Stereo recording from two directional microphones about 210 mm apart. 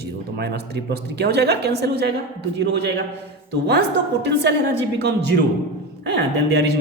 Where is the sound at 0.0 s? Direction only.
50° right (ahead or behind).